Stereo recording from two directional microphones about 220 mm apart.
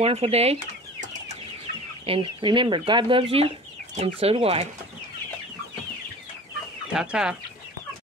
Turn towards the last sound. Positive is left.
turn(degrees=-5)  # may be behind; listen again after turning